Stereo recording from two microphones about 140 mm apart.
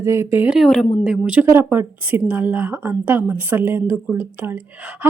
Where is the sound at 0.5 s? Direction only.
5° left (ahead or behind).